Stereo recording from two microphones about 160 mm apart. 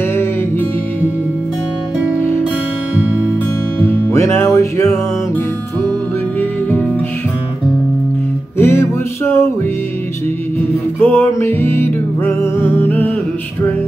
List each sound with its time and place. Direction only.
3.8 s music: 15° left (ahead or behind)
8.5 s music: 15° left (ahead or behind)
11.0 s music: 15° left (ahead or behind)